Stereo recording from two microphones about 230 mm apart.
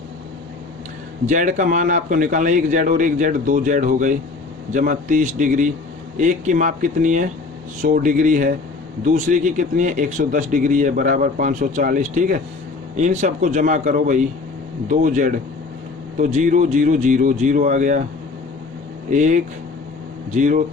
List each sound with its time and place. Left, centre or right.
1.3 s speech: right
19.1 s speech: right